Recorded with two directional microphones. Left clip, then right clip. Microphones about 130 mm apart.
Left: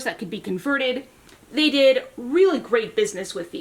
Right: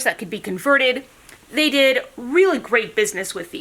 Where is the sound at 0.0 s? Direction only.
30° right (ahead or behind).